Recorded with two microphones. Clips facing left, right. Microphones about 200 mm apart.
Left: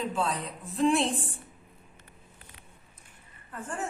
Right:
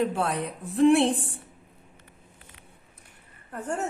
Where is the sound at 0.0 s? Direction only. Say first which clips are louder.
Right 4 dB; 65° right (ahead or behind).